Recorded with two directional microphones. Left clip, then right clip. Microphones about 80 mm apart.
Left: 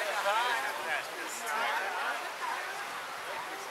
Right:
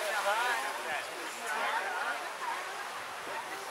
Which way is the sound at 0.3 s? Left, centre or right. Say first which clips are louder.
Left 1 dB; left.